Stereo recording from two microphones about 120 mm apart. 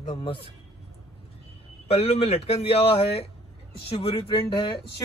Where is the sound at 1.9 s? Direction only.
55° left (ahead or behind).